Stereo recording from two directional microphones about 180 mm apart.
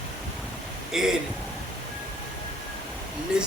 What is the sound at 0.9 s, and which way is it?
Speech, centre (ahead or behind).